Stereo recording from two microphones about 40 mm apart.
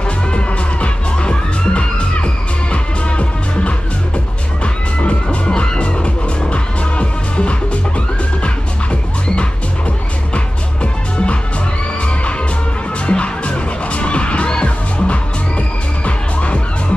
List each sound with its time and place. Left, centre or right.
0.3 s music: left
4.9 s music: left
10.3 s music: left
13.0 s music: left